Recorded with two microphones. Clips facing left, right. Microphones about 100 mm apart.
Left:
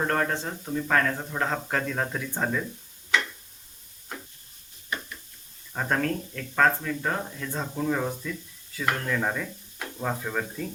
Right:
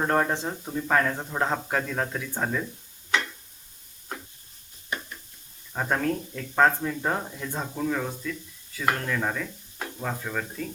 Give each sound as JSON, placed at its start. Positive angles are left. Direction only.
{"t": 0.1, "sound": "speech", "side_deg": -15}
{"t": 1.7, "sound": "speech", "side_deg": 0}
{"t": 5.7, "sound": "speech", "side_deg": -5}
{"t": 7.8, "sound": "speech", "side_deg": 5}